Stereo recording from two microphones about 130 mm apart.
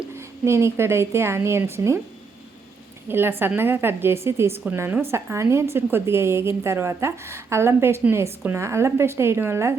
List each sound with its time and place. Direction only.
0.1 s a woman's voice: 20° right (ahead or behind)
3.1 s a woman's voice: 15° right (ahead or behind)